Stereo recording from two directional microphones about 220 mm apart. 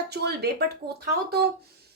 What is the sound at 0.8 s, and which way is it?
Speech, 30° right (ahead or behind).